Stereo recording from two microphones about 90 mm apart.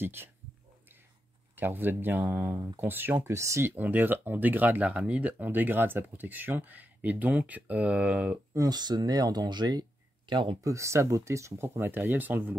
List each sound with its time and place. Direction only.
0.0 s speech: 25° right (ahead or behind)
1.5 s speech: 25° right (ahead or behind)
8.5 s speech: 50° right (ahead or behind); by 10.6 s 65° right (ahead or behind)
10.6 s speech: 35° right (ahead or behind)